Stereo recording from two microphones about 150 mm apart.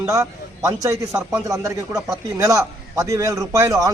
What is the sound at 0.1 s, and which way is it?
A man's voice, 20° right (ahead or behind).